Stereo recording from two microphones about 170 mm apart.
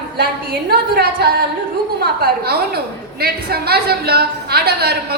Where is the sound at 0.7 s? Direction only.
70° right (ahead or behind).